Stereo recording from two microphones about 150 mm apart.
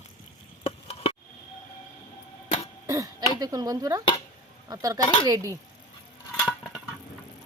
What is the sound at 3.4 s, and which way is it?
Speech, 25° right (ahead or behind).